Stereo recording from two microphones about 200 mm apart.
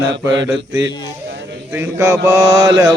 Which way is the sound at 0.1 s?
60° right (ahead or behind).